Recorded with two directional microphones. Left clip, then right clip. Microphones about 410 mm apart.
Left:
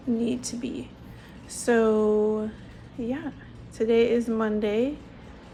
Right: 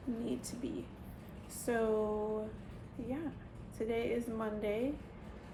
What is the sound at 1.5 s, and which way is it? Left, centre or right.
Speech, left.